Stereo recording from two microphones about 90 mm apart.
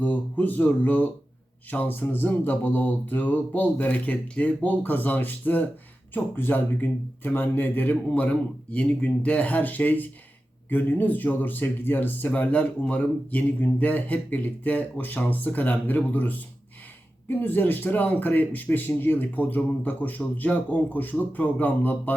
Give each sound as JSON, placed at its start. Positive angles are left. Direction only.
{"t": 0.0, "sound": "speech", "side_deg": 15}